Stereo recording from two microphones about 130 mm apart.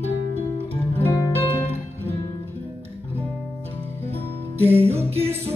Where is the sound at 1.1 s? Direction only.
20° left (ahead or behind).